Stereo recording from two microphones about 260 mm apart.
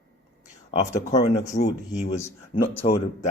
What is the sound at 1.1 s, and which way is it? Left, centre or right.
Speech, left.